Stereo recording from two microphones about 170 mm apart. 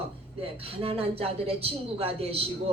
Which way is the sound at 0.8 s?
35° right (ahead or behind).